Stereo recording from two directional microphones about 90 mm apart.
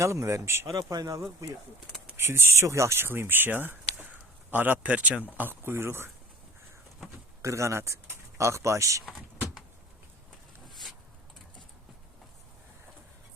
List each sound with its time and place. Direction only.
0.0 s speech: 35° right (ahead or behind)
0.7 s speech: 45° right (ahead or behind)
2.1 s a man's voice: 30° right (ahead or behind)
7.4 s speech: 35° right (ahead or behind)